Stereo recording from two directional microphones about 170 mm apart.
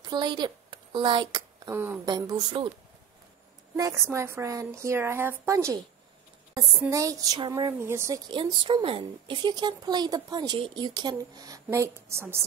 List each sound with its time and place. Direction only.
0.0 s a woman's voice: 25° right (ahead or behind)
3.7 s a woman's voice: 15° right (ahead or behind)
8.3 s a woman's voice: 30° right (ahead or behind); by 12.4 s 15° right (ahead or behind)